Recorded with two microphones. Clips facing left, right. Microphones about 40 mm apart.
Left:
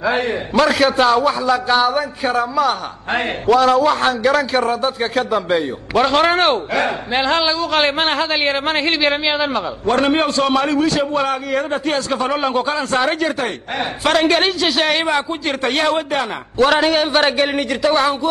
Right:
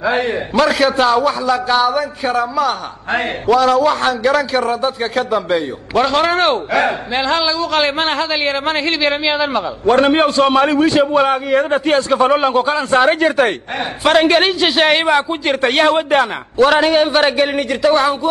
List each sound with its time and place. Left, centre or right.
0.0 s a man's voice: centre
3.4 s a man's voice: centre
7.2 s a man's voice: centre
9.8 s a man's voice: centre
10.6 s a man's voice: right; by 12.8 s centre
12.9 s a man's voice: centre
15.0 s a man's voice: centre
15.6 s a man's voice: right
16.5 s a man's voice: centre